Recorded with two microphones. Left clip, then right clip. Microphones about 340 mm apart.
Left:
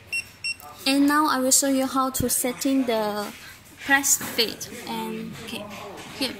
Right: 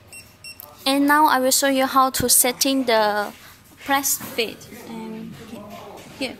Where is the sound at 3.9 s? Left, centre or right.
Centre.